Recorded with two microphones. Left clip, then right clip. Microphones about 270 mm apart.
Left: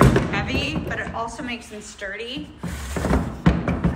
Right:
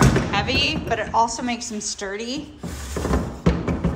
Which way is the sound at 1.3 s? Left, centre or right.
Centre.